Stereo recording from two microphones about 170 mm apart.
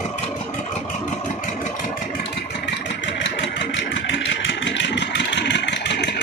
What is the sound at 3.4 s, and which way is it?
Vehicle, 90° left.